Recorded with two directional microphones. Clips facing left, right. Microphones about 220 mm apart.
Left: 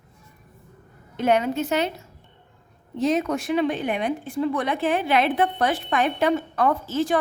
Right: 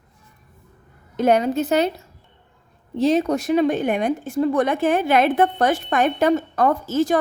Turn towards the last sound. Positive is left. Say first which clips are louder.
# right 3 dB
turn(degrees=-45)  # may be behind; listen again after turning